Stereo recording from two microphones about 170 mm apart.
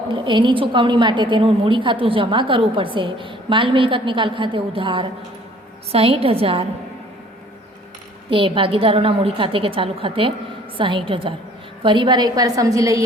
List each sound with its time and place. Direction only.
0.1 s a woman's voice: 30° right (ahead or behind)
8.3 s a woman's voice: 30° right (ahead or behind)